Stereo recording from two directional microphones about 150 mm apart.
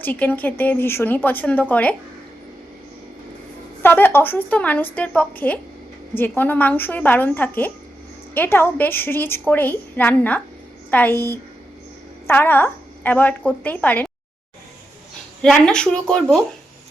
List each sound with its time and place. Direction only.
0.0 s a woman's voice: 10° left (ahead or behind)
3.8 s a woman's voice: 15° left (ahead or behind)
15.4 s speech: 5° left (ahead or behind)